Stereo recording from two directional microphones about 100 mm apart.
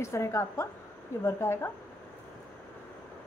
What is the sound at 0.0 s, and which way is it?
A woman's voice, 30° left (ahead or behind).